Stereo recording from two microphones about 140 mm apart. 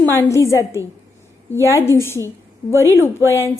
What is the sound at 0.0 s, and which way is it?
A woman's voice, 20° left (ahead or behind).